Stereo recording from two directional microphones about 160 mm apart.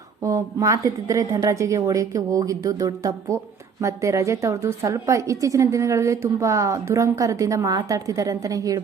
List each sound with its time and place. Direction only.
0.2 s a woman's voice: 20° right (ahead or behind)